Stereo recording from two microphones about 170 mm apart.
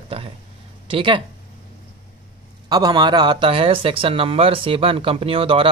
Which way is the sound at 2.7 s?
25° right (ahead or behind).